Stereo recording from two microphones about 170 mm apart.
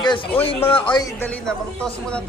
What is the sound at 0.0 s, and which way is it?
Speech, 25° left (ahead or behind).